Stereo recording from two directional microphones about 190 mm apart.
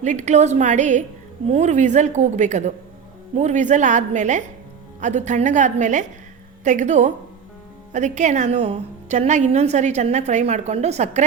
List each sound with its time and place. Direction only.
0.0 s a woman's voice: 40° right (ahead or behind)